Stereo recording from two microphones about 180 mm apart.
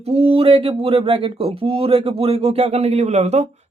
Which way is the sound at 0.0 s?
35° right (ahead or behind).